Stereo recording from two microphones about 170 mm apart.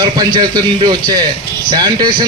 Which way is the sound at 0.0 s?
25° right (ahead or behind).